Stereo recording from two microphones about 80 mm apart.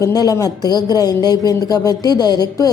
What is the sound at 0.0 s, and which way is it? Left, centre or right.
A woman's voice, left.